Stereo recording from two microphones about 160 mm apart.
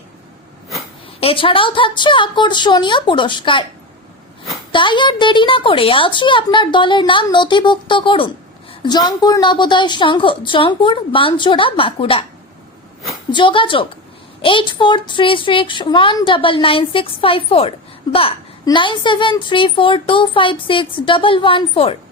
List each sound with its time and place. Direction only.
1.2 s speech: 35° left (ahead or behind)
4.7 s a woman's voice: 30° left (ahead or behind)
13.3 s speech: 30° left (ahead or behind)